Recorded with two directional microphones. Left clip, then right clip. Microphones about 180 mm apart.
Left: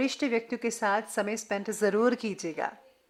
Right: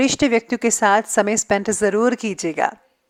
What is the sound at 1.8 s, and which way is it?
Speech, 30° right (ahead or behind).